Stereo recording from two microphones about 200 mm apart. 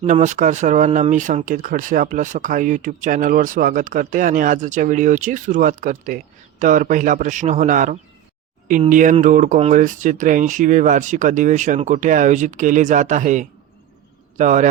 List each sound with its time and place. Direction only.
0.0 s speech: 35° right (ahead or behind)